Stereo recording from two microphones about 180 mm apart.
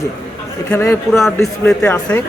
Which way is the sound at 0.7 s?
15° left (ahead or behind).